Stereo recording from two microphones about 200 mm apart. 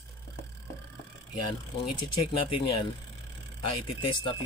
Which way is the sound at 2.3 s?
25° left (ahead or behind).